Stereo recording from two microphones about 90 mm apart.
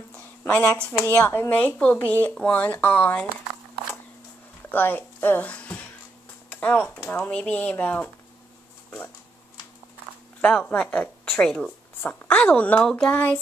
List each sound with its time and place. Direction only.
0.5 s speech: 20° left (ahead or behind)
4.6 s speech: 20° left (ahead or behind)
10.4 s speech: 15° left (ahead or behind)
12.0 s speech: 20° left (ahead or behind)